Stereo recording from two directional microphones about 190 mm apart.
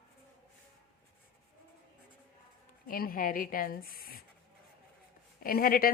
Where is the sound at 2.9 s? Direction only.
50° left (ahead or behind).